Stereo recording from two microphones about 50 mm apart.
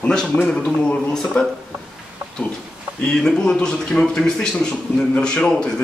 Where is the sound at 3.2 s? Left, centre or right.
Centre.